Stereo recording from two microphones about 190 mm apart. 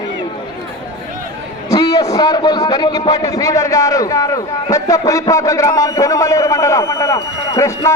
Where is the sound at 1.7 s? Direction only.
20° left (ahead or behind).